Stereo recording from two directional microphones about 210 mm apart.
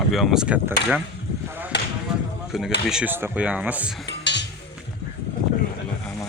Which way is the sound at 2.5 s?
Centre (ahead or behind).